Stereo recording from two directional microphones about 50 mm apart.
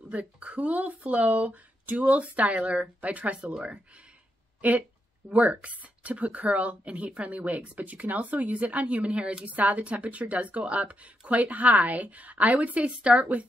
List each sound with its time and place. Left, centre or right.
0.1 s speech: right